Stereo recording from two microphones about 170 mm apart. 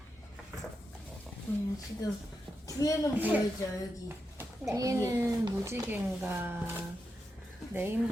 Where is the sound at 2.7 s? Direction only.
20° left (ahead or behind).